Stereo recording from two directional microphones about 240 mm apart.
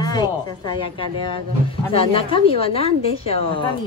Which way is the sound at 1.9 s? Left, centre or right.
Left.